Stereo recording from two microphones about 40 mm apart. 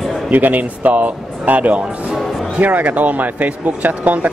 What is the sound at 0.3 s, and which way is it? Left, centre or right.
Speech, right.